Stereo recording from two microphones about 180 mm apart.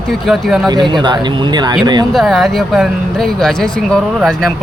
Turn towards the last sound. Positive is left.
turn(degrees=0)  # may be behind; listen again after turning